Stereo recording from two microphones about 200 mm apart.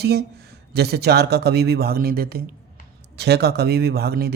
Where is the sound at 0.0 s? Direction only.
55° right (ahead or behind).